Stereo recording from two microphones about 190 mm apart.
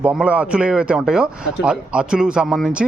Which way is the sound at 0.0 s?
5° right (ahead or behind).